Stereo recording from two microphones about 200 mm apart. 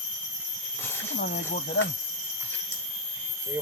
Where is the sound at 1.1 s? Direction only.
50° left (ahead or behind).